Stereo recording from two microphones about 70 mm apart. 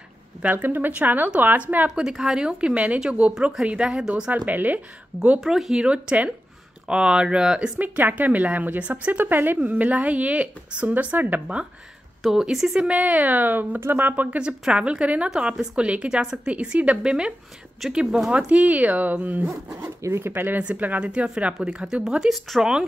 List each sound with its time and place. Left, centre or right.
0.4 s speech: right
2.0 s a woman's voice: centre
5.4 s speech: centre
5.9 s a woman's voice: centre
12.2 s a woman's voice: centre
18.3 s speech: centre
19.7 s a woman's voice: right; by 22.8 s centre